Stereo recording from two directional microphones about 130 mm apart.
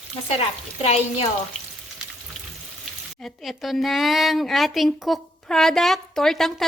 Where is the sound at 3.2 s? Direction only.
Centre (ahead or behind).